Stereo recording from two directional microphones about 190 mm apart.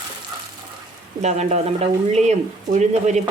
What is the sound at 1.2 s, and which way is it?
Stir, 35° right (ahead or behind).